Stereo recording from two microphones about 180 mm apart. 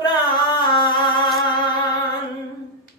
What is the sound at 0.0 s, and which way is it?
Carnatic music, 25° left (ahead or behind).